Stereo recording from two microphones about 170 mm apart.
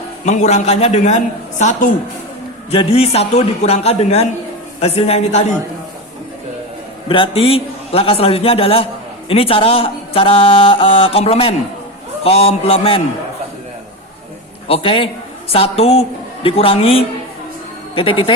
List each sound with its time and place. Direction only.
0.3 s a man's voice: 45° left (ahead or behind)
7.1 s speech: 30° left (ahead or behind)
14.7 s speech: 30° left (ahead or behind)